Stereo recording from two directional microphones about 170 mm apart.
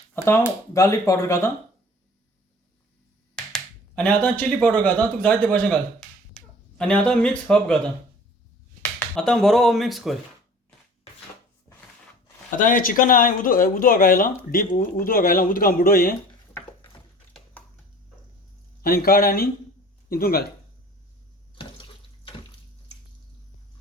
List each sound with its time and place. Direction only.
0.1 s speech: 15° left (ahead or behind)
3.3 s speech: 5° left (ahead or behind)
8.8 s speech: 5° left (ahead or behind)
12.5 s speech: 55° left (ahead or behind)
18.8 s speech: 60° left (ahead or behind)
21.5 s bathtub: 30° left (ahead or behind)